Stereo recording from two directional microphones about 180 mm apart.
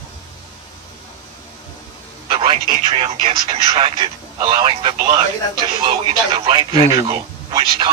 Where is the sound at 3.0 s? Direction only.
30° right (ahead or behind).